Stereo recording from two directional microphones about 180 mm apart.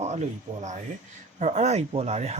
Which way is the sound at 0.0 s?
40° right (ahead or behind).